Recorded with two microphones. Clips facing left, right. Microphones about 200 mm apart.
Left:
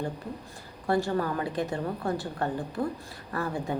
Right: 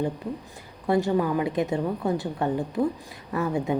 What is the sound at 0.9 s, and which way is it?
A woman's voice, 20° right (ahead or behind).